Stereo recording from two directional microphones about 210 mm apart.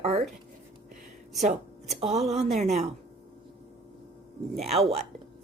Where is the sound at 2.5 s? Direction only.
30° right (ahead or behind).